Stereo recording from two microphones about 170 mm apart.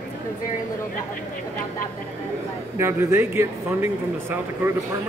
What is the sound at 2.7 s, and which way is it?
Speech, 15° right (ahead or behind).